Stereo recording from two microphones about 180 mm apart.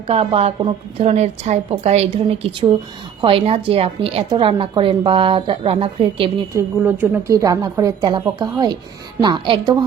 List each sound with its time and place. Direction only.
0.1 s a woman's voice: 35° right (ahead or behind)
6.5 s a woman's voice: 15° right (ahead or behind)